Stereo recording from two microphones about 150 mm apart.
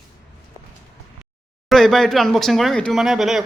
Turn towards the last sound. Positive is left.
turn(degrees=0)  # may be behind; listen again after turning